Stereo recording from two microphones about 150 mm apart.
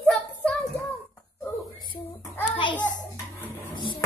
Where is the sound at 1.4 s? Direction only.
20° left (ahead or behind).